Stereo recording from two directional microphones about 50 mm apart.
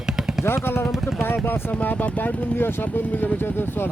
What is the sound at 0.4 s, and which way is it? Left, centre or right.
Speech, left.